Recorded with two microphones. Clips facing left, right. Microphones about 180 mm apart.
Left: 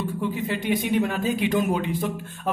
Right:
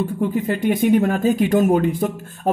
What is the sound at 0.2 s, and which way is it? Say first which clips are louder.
Speech: right 8 dB; 50° right (ahead or behind).